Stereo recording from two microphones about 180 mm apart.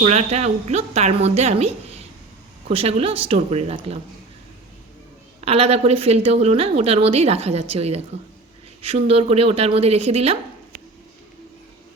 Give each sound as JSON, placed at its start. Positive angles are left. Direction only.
{"t": 0.0, "sound": "a woman's voice", "side_deg": -35}
{"t": 5.5, "sound": "a woman's voice", "side_deg": -35}